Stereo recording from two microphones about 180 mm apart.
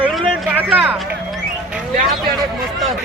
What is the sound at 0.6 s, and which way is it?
Speech, 5° right (ahead or behind).